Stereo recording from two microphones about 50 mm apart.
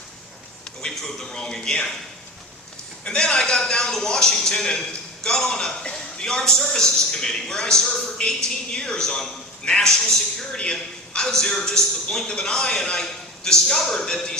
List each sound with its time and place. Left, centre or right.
0.8 s a man's voice: centre
3.0 s a man's voice: centre